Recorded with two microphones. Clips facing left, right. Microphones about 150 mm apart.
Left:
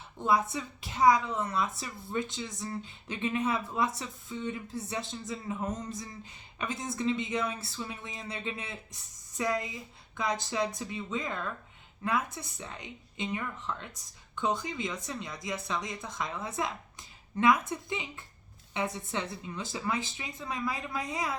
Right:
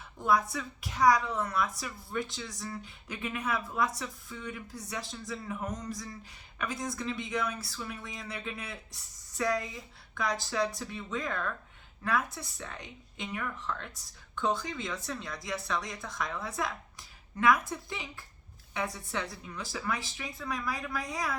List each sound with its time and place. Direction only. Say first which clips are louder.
0.2 s a woman's voice: even; 25° left (ahead or behind)